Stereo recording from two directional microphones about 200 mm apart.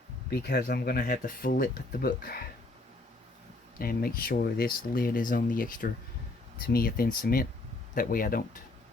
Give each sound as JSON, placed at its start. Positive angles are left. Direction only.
{"t": 0.3, "sound": "speech", "side_deg": 50}
{"t": 3.8, "sound": "speech", "side_deg": 45}